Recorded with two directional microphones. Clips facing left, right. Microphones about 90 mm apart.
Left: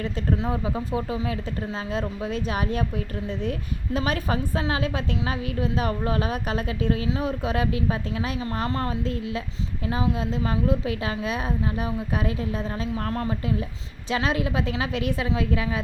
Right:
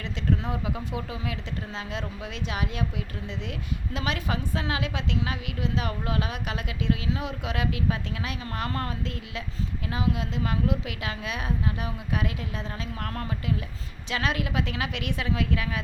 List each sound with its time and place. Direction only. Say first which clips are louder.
0.3 s a woman's voice: left 4 dB; 30° left (ahead or behind)
3.9 s a woman's voice: left 5 dB; 40° left (ahead or behind)